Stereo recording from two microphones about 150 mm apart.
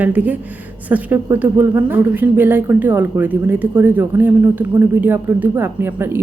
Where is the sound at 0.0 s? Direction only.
10° right (ahead or behind).